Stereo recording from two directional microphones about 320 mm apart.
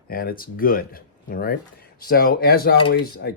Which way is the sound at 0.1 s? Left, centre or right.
Left.